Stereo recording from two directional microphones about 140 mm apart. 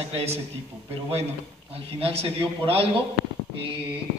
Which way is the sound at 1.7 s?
45° right (ahead or behind).